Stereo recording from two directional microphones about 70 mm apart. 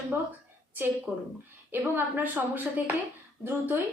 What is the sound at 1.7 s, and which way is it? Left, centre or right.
A woman's voice, right.